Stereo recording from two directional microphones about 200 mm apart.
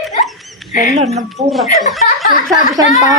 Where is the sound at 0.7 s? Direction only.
40° left (ahead or behind).